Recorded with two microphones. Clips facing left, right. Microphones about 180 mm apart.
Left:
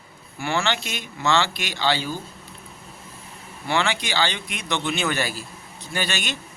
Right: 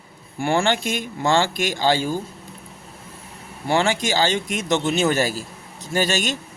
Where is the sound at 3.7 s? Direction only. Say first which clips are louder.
Right 4 dB; 45° right (ahead or behind).